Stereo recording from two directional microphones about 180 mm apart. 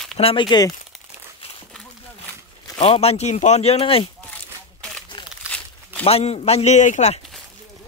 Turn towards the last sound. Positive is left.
turn(degrees=40)  # may be behind; listen again after turning